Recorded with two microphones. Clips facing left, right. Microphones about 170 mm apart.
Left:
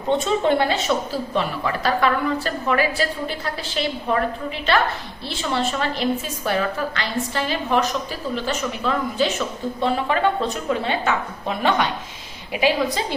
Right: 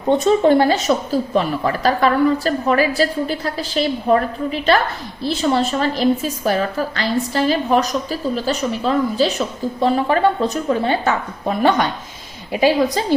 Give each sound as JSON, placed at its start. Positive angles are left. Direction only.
{"t": 0.4, "sound": "a woman's voice", "side_deg": -40}